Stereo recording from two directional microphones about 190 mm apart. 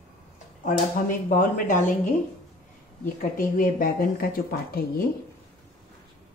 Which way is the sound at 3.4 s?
45° left (ahead or behind).